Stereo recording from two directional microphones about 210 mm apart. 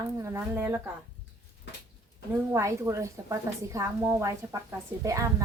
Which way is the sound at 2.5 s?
15° right (ahead or behind).